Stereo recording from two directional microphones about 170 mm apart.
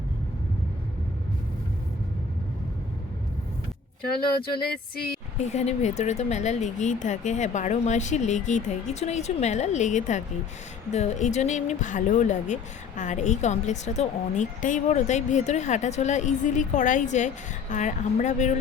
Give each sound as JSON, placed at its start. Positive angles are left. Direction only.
{"t": 5.4, "sound": "a woman's voice", "side_deg": 40}